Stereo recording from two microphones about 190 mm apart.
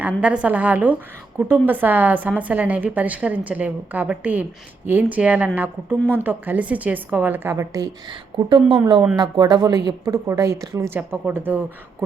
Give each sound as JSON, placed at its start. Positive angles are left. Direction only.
{"t": 0.0, "sound": "a woman's voice", "side_deg": -5}
{"t": 8.6, "sound": "a woman's voice", "side_deg": -5}
{"t": 9.1, "sound": "a woman's voice", "side_deg": -25}